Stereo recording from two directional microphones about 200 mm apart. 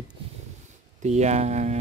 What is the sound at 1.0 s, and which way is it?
Speech, 35° right (ahead or behind).